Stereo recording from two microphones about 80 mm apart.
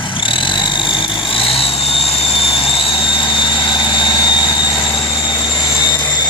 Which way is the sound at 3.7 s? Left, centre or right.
Left.